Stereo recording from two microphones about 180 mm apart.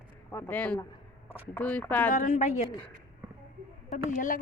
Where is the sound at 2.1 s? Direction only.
40° left (ahead or behind).